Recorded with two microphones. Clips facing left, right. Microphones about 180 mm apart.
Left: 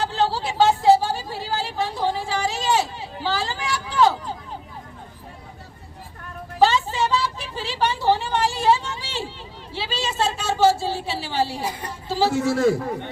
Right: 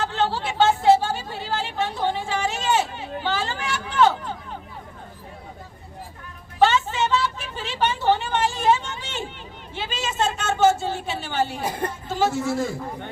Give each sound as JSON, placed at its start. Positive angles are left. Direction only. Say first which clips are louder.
{"t": 0.0, "sound": "a sound", "louder": "left 1 dB", "side_deg": 35}
{"t": 3.3, "sound": "vehicle", "louder": "left 1 dB", "side_deg": 35}
{"t": 6.6, "sound": "a sound", "louder": "even", "side_deg": 35}
{"t": 9.7, "sound": "a woman's voice", "louder": "left 1 dB", "side_deg": 30}
{"t": 11.6, "sound": "a woman's voice", "louder": "right 3 dB", "side_deg": -50}
{"t": 12.0, "sound": "speech", "louder": "left 2 dB", "side_deg": 30}
{"t": 12.3, "sound": "a man's voice", "louder": "left 5 dB", "side_deg": 70}